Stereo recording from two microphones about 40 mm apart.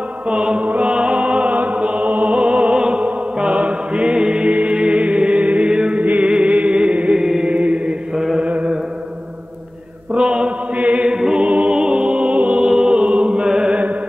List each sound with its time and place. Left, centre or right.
0.3 s music: right
7.4 s mantra: right
10.1 s chant: right
11.1 s choir: right
11.4 s music: right
12.6 s mantra: centre
12.9 s music: right